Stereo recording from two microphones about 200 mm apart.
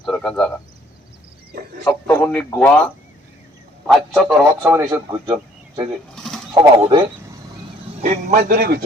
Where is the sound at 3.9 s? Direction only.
Centre (ahead or behind).